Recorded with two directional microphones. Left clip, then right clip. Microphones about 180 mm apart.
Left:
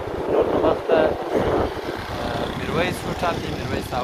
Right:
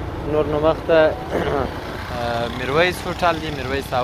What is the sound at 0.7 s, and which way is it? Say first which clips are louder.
Speech: right 3 dB; 55° right (ahead or behind).